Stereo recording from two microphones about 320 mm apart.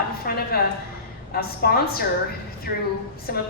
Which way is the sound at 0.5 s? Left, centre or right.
Left.